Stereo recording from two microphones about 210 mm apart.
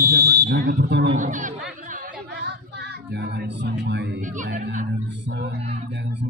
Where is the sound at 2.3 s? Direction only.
55° right (ahead or behind).